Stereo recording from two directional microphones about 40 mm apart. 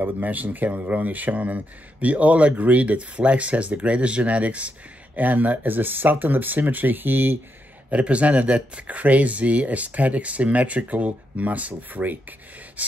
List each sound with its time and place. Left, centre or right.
0.0 s speech: right
7.9 s speech: right